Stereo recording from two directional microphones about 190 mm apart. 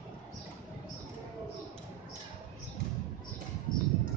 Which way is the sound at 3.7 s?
45° left (ahead or behind).